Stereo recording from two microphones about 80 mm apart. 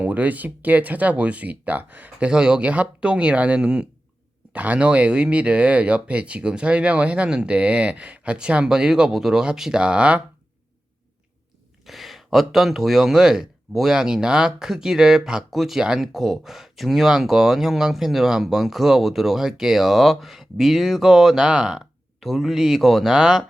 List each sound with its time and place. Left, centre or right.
0.0 s speech: centre
11.9 s speech: centre